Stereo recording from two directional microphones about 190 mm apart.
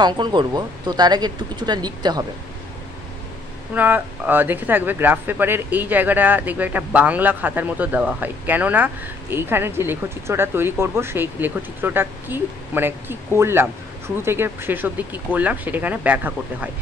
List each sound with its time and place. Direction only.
0.0 s speech: 25° right (ahead or behind)
3.7 s speech: 10° right (ahead or behind)